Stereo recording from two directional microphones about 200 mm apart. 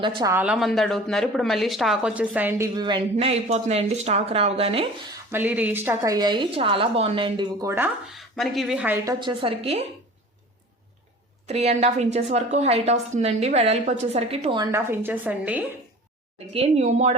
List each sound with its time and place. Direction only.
0.0 s a woman's voice: 20° right (ahead or behind)
0.3 s speech: 5° right (ahead or behind); by 4.9 s 30° right (ahead or behind)
5.1 s speech: 10° right (ahead or behind)
8.1 s speech: centre (ahead or behind)
9.0 s a woman's voice: 25° right (ahead or behind)
11.4 s a woman's voice: 30° right (ahead or behind)
14.6 s speech: 15° right (ahead or behind)
16.5 s a woman's voice: 30° right (ahead or behind)